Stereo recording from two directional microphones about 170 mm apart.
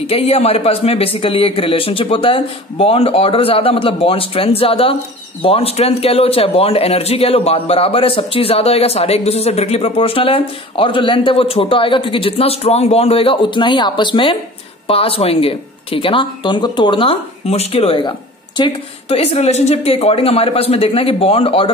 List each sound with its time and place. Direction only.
0.0 s a man's voice: 35° left (ahead or behind)